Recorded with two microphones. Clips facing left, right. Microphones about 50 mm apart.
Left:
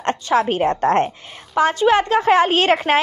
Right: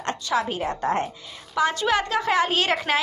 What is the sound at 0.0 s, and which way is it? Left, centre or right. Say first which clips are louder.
A woman's voice: left 7 dB; left.